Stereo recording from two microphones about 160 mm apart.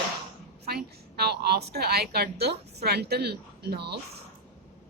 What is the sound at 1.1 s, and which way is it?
A woman's voice, 85° right.